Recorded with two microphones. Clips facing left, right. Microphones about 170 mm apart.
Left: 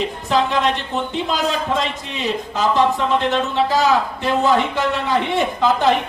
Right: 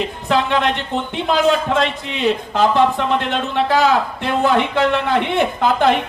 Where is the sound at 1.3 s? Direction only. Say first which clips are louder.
Right 7 dB; 60° right (ahead or behind).